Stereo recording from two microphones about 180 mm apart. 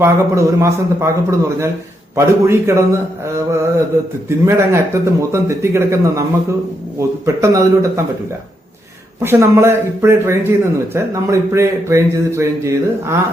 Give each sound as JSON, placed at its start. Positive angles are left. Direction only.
{"t": 0.0, "sound": "speech", "side_deg": -15}
{"t": 7.3, "sound": "speech", "side_deg": -15}
{"t": 9.2, "sound": "speech", "side_deg": -15}